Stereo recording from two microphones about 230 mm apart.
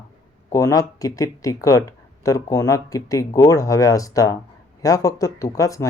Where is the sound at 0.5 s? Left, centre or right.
Centre.